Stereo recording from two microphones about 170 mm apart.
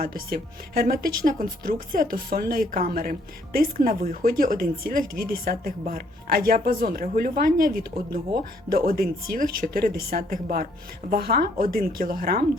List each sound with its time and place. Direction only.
0.0 s speech: 60° right (ahead or behind)